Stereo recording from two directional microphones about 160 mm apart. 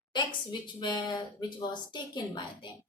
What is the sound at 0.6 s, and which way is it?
A woman's voice, 30° left (ahead or behind).